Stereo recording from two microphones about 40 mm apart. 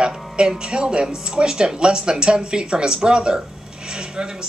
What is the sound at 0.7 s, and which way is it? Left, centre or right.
Speech, right.